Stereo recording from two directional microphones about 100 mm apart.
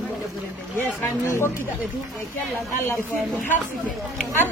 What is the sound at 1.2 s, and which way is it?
Speech, 25° left (ahead or behind).